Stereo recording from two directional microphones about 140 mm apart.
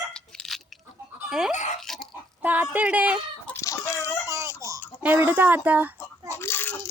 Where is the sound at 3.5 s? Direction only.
20° left (ahead or behind).